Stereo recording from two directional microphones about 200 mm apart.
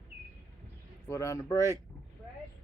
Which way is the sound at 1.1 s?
15° left (ahead or behind).